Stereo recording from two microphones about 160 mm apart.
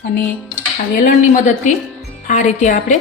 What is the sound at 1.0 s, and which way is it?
Speech, 50° left (ahead or behind).